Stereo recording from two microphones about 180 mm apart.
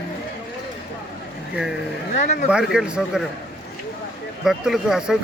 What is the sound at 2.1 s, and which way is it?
Speech, 40° left (ahead or behind).